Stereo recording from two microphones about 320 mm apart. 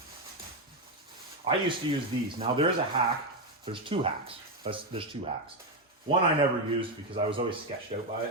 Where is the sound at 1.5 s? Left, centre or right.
Centre.